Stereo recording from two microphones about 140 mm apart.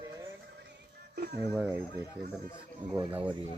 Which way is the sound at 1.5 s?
15° right (ahead or behind).